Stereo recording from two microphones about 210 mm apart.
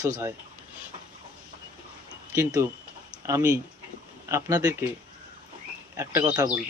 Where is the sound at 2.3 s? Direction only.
15° right (ahead or behind).